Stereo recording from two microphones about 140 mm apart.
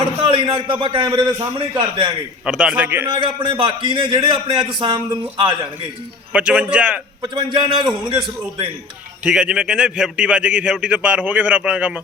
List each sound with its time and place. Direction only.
0.2 s a man's voice: 40° right (ahead or behind)
2.4 s a man's voice: 5° right (ahead or behind)
3.1 s a man's voice: 35° right (ahead or behind)
6.3 s a man's voice: 10° right (ahead or behind)
7.2 s a man's voice: 35° right (ahead or behind)
9.2 s a man's voice: 10° right (ahead or behind)